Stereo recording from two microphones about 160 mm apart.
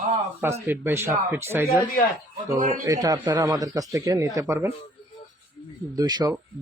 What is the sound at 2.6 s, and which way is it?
Speech, 55° right (ahead or behind).